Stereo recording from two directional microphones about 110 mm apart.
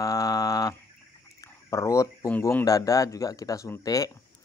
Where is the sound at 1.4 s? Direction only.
30° left (ahead or behind).